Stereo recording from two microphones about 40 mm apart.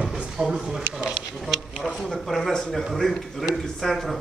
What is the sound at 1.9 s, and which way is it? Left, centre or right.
Speech, centre.